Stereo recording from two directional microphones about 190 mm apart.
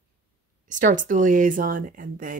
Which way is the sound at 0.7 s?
45° right (ahead or behind).